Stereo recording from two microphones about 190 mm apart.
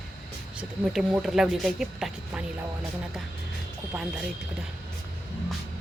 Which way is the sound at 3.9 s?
5° right (ahead or behind).